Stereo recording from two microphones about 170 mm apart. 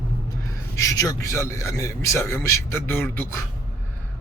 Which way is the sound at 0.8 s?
20° left (ahead or behind).